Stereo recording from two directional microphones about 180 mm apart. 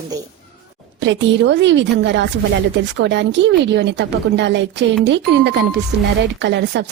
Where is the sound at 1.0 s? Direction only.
85° right.